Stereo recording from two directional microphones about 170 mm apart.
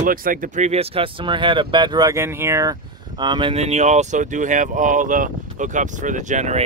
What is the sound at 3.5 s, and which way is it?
Speech, 40° right (ahead or behind).